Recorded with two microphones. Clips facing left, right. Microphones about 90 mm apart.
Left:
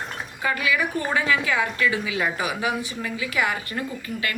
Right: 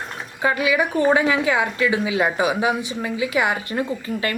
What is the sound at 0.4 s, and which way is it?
A woman's voice, 20° right (ahead or behind).